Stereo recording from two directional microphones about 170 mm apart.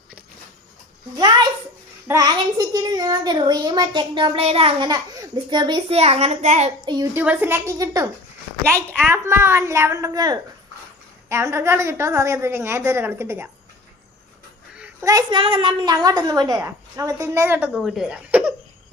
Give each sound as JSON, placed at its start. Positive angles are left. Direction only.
{"t": 2.0, "sound": "a child's voice", "side_deg": -20}
{"t": 7.2, "sound": "a woman's voice", "side_deg": -10}
{"t": 9.1, "sound": "a woman's voice", "side_deg": -15}
{"t": 14.8, "sound": "a child's voice", "side_deg": -20}
{"t": 17.7, "sound": "speech", "side_deg": 0}